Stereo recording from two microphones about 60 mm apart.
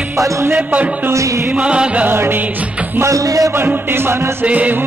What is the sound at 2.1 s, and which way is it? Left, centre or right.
Music, right.